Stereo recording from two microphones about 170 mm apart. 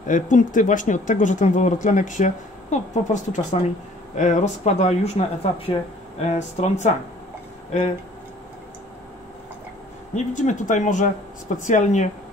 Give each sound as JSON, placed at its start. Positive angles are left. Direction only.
{"t": 0.0, "sound": "speech", "side_deg": 50}
{"t": 10.1, "sound": "speech", "side_deg": 45}